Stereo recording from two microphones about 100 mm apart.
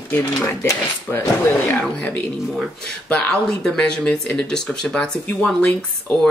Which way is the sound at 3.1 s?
10° left (ahead or behind).